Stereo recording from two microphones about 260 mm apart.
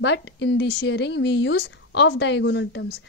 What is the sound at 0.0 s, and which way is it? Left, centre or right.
Speech, left.